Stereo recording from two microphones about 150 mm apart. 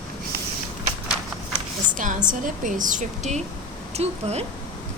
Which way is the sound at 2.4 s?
60° right (ahead or behind).